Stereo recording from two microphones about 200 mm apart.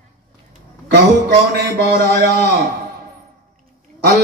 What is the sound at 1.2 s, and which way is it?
A man's voice, 55° right (ahead or behind).